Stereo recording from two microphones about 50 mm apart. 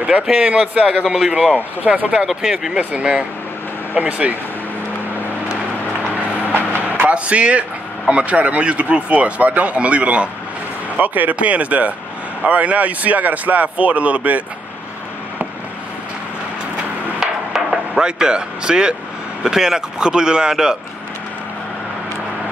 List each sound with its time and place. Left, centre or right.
0.4 s speech: right
1.1 s speech: centre
2.2 s speech: centre
2.8 s speech: right
6.5 s vehicle: left
6.8 s a sound: right
8.1 s speech: right
17.5 s a sound: centre
18.0 s speech: centre